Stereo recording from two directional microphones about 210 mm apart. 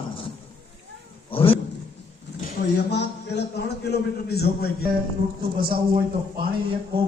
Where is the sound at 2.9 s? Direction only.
55° left (ahead or behind).